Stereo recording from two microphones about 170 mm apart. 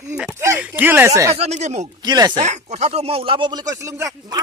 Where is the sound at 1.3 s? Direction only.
40° right (ahead or behind).